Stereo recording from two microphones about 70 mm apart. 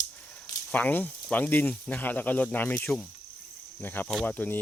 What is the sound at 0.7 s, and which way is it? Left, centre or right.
Speech, left.